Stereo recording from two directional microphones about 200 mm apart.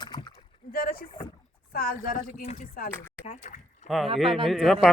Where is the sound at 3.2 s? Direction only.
35° left (ahead or behind).